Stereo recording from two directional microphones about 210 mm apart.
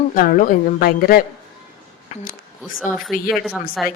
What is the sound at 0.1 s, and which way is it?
A woman's voice, 40° left (ahead or behind).